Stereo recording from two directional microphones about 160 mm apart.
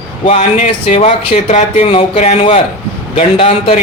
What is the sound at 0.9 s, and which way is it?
Speech, 40° left (ahead or behind).